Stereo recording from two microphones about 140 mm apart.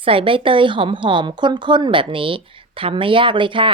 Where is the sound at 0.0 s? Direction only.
40° right (ahead or behind).